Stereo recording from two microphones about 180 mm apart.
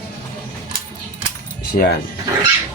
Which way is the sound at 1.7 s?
60° left (ahead or behind).